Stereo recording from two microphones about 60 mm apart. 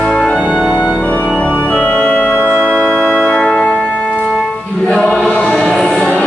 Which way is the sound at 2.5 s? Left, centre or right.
Centre.